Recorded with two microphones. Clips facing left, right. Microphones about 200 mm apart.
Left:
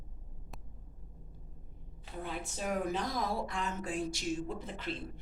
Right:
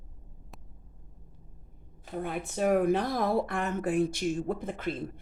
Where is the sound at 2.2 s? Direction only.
55° right (ahead or behind).